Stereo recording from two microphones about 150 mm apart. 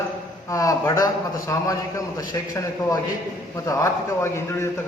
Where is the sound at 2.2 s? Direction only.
25° left (ahead or behind).